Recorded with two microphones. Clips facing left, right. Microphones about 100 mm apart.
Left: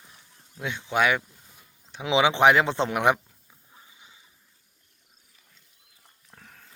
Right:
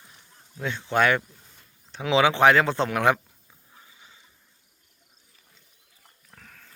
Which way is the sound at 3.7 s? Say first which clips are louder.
Even; 20° left (ahead or behind).